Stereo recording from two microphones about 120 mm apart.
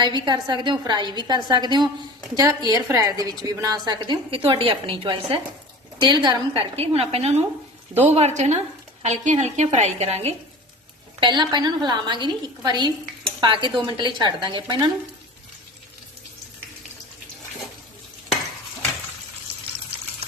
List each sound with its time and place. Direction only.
0.0 s a woman's voice: 40° right (ahead or behind)
6.0 s a woman's voice: 35° right (ahead or behind)
6.5 s a woman's voice: 55° right (ahead or behind)
11.2 s a woman's voice: 40° right (ahead or behind)